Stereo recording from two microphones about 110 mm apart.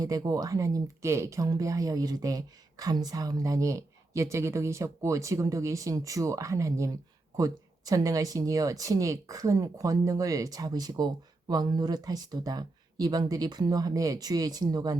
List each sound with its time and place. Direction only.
0.0 s speech: 35° right (ahead or behind)